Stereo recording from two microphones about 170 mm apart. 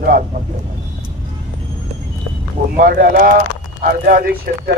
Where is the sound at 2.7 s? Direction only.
55° right (ahead or behind).